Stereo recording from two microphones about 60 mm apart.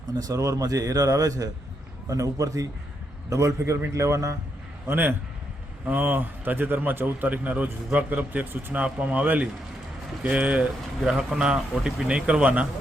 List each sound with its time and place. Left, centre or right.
0.1 s speech: right
2.0 s a man's voice: right
4.9 s a man's voice: right
11.0 s a man's voice: centre